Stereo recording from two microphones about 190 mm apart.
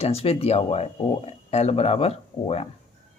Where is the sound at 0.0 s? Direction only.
30° left (ahead or behind).